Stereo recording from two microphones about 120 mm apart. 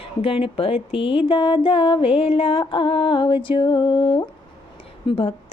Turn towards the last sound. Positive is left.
turn(degrees=50)  # may be behind; listen again after turning